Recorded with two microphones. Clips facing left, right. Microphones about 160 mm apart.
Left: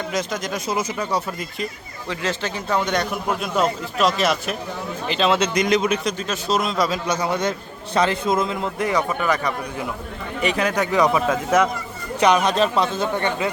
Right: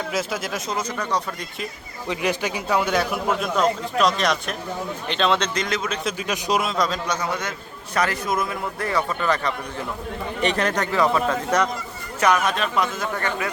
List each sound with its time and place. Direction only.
0.1 s speech: 5° right (ahead or behind)
0.7 s speech: 10° left (ahead or behind)
2.0 s a man's voice: 15° right (ahead or behind); by 6.0 s 15° left (ahead or behind)
6.1 s a man's voice: 10° right (ahead or behind)
6.7 s speech: 5° left (ahead or behind)
7.3 s a man's voice: 30° left (ahead or behind); by 11.7 s 5° left (ahead or behind)
12.2 s a man's voice: 20° left (ahead or behind)
12.5 s a man's voice: 30° left (ahead or behind)